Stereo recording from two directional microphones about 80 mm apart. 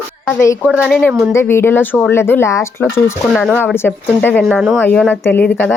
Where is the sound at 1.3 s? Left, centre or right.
Left.